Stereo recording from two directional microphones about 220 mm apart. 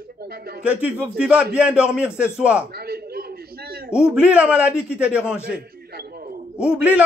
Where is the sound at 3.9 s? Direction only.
5° right (ahead or behind).